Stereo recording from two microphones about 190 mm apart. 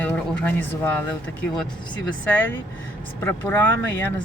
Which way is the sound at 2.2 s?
10° left (ahead or behind).